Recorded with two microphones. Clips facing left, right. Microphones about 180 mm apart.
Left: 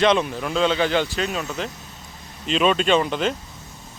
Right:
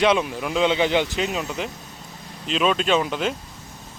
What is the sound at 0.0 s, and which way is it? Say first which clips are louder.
Speech: left 1 dB; 10° right (ahead or behind).